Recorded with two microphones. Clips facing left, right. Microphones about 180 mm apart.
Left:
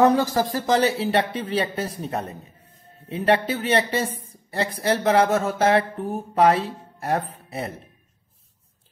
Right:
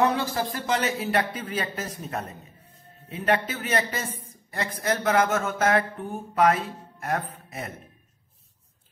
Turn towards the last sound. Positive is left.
turn(degrees=30)  # may be behind; listen again after turning